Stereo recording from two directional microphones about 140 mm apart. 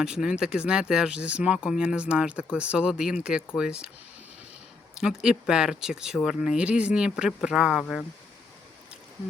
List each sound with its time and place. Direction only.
0.0 s speech: 5° right (ahead or behind)
4.9 s speech: 5° right (ahead or behind)